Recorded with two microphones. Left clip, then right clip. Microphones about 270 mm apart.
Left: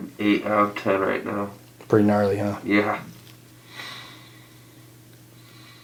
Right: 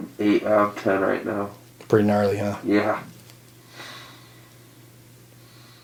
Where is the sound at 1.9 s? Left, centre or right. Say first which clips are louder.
Even; centre.